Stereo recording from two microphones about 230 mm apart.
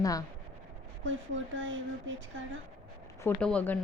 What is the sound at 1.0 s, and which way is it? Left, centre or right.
Speech, right.